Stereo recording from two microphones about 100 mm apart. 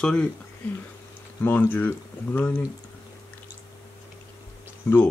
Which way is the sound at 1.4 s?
15° left (ahead or behind).